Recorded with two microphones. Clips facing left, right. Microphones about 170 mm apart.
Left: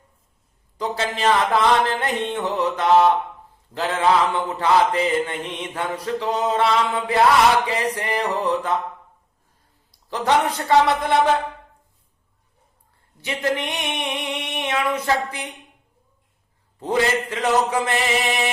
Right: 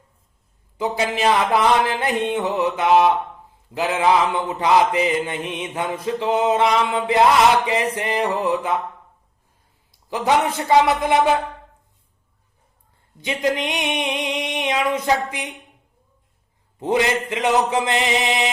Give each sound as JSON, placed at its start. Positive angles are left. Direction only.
{"t": 0.8, "sound": "mantra", "side_deg": -10}
{"t": 10.1, "sound": "mantra", "side_deg": -10}
{"t": 13.1, "sound": "mantra", "side_deg": -20}
{"t": 16.8, "sound": "mantra", "side_deg": -15}